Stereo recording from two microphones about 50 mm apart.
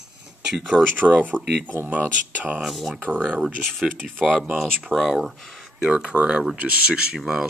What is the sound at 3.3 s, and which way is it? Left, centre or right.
Speech, centre.